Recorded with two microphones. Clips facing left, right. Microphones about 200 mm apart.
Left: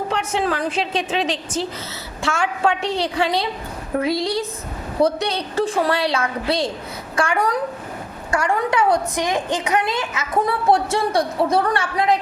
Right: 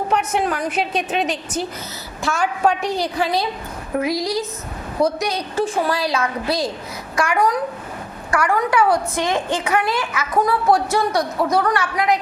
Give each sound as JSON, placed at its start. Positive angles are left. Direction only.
{"t": 0.2, "sound": "a woman's voice", "side_deg": 25}